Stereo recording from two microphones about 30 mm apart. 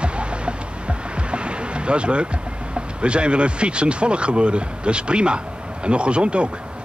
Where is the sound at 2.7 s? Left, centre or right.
Right.